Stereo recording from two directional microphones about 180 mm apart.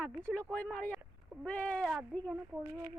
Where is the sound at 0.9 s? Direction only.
10° right (ahead or behind).